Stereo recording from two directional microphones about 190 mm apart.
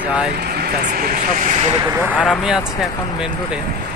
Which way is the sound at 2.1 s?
5° left (ahead or behind).